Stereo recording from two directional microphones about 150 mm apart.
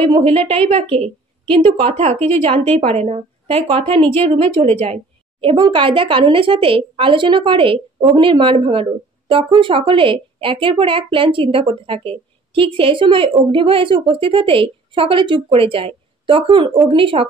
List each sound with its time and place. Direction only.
0.1 s a woman's voice: 40° right (ahead or behind)